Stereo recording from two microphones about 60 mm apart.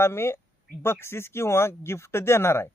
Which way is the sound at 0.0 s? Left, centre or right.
Left.